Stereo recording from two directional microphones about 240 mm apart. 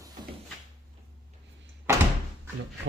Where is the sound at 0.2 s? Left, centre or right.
Centre.